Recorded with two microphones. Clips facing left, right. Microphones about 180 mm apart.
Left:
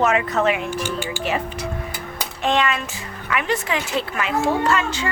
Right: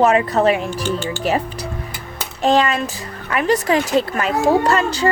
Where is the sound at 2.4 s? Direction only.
35° right (ahead or behind).